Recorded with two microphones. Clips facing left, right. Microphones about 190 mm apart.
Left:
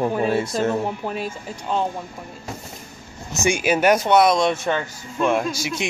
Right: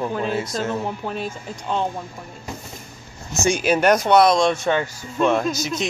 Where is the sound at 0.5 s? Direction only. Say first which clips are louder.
Left 3 dB; 5° left (ahead or behind).